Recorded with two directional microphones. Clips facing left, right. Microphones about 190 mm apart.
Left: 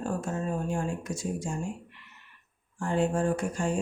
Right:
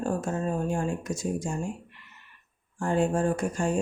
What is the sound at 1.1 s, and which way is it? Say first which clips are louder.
Speech: right 3 dB; 45° right (ahead or behind).